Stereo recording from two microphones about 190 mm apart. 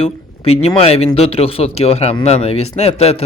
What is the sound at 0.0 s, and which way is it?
Speech, 30° left (ahead or behind).